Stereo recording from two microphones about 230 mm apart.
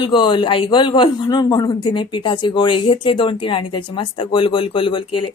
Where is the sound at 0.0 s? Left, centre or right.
Centre.